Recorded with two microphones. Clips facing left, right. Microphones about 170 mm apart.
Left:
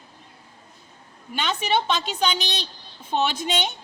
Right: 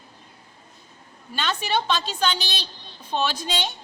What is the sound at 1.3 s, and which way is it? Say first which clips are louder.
A woman's voice: left 1 dB; 20° left (ahead or behind).